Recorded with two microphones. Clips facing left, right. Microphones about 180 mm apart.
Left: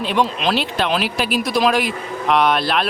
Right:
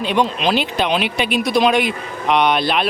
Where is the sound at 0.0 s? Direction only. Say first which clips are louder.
Right 1 dB; centre (ahead or behind).